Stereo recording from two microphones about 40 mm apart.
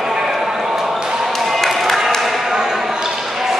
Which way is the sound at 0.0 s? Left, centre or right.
Centre.